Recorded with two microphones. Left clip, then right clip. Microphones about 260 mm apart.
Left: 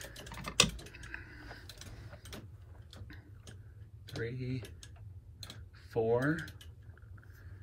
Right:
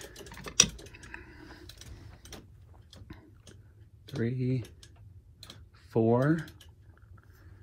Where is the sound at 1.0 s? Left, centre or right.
Centre.